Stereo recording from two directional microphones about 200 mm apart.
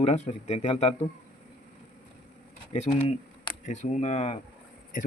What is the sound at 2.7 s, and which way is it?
Speech, 35° left (ahead or behind).